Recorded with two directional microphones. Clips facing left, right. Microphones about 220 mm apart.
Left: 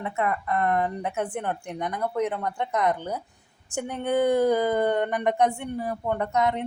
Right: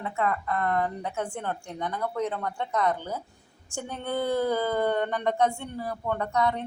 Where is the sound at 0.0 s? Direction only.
20° left (ahead or behind).